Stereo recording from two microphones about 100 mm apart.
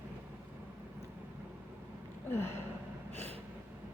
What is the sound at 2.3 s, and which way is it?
Gasp, 25° left (ahead or behind).